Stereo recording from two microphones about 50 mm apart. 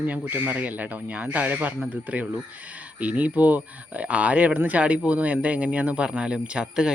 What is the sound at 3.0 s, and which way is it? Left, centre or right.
Speech, right.